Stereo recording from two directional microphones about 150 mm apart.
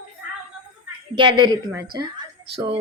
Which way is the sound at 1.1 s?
30° right (ahead or behind).